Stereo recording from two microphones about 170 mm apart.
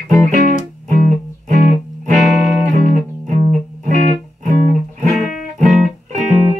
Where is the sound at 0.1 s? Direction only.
50° right (ahead or behind).